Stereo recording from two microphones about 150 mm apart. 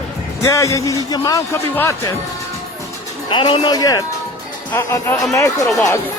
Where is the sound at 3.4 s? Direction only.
30° left (ahead or behind).